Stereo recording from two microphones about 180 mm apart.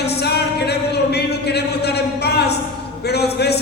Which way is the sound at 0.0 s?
65° left (ahead or behind).